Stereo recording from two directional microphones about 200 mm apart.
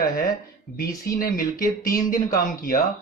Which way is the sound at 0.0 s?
45° left (ahead or behind).